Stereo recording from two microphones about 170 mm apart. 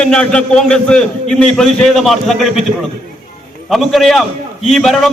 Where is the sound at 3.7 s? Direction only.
Centre (ahead or behind).